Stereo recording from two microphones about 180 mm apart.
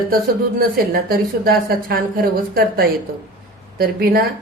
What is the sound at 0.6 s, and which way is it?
A woman's voice, 55° right (ahead or behind).